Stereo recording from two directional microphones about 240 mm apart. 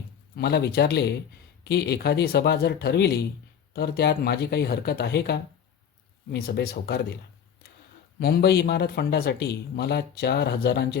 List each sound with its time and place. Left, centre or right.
0.3 s speech: left
8.2 s speech: left